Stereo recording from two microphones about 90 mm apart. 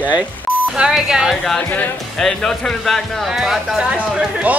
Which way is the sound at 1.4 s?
5° left (ahead or behind).